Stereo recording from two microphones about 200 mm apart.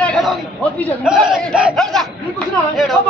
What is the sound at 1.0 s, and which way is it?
Speech, 5° right (ahead or behind).